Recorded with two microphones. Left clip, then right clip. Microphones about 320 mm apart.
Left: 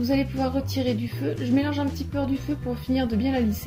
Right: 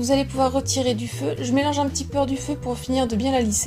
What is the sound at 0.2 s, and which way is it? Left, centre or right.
Speech, right.